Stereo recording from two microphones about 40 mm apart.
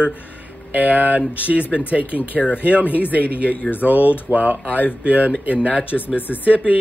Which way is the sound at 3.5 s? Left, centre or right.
Left.